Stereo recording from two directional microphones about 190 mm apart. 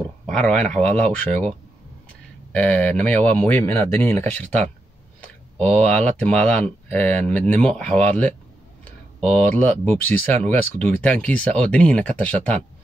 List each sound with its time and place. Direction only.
0.3 s speech: 5° left (ahead or behind)
2.5 s speech: 10° left (ahead or behind)